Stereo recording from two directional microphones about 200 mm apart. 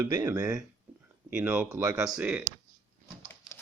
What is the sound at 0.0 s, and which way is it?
Speech, 15° right (ahead or behind).